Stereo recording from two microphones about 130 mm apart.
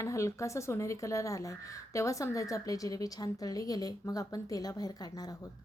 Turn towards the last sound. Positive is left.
turn(degrees=30)  # may be behind; listen again after turning